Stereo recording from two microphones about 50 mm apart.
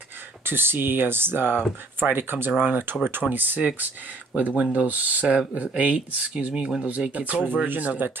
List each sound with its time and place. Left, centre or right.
0.5 s speech: right; by 6.7 s centre
7.1 s speech: right
7.6 s speech: right